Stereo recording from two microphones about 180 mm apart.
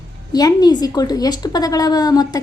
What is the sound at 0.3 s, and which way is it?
A woman's voice, 20° left (ahead or behind).